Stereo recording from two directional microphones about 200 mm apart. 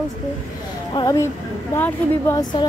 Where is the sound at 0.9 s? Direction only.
15° left (ahead or behind).